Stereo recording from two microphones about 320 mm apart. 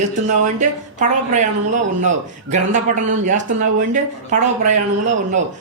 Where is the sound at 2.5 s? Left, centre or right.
Right.